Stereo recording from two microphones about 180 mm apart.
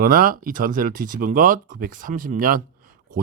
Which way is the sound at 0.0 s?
50° right (ahead or behind).